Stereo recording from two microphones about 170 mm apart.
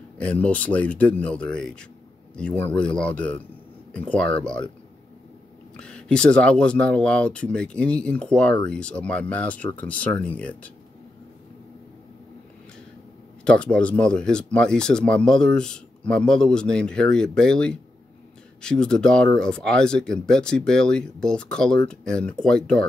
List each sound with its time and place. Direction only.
0.2 s speech: 10° left (ahead or behind)
5.8 s speech: 5° left (ahead or behind)
13.4 s speech: 5° left (ahead or behind)